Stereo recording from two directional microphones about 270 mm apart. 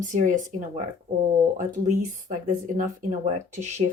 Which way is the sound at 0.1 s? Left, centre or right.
Right.